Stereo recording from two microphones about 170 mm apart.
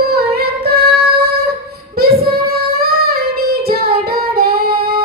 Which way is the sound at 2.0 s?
65° right (ahead or behind).